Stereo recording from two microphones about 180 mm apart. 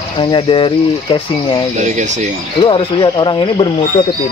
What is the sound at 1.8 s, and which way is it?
Speech, 40° right (ahead or behind).